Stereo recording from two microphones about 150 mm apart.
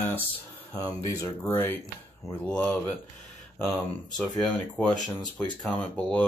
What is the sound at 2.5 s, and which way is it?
Speech, 5° left (ahead or behind).